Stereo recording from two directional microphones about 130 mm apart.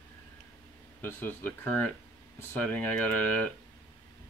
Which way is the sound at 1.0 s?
15° left (ahead or behind).